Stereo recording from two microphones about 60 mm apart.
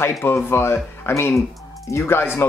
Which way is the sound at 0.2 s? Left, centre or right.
Left.